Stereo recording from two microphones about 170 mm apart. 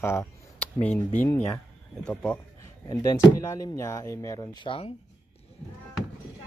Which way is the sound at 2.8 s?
15° left (ahead or behind).